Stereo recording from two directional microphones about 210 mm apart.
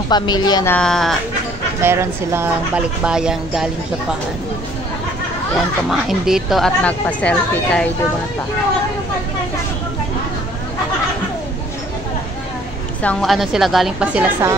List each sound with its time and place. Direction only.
0.1 s speech: 20° left (ahead or behind)
0.7 s speech: centre (ahead or behind)
1.8 s speech: 10° right (ahead or behind)
5.9 s speech: centre (ahead or behind)
13.0 s speech: 5° left (ahead or behind)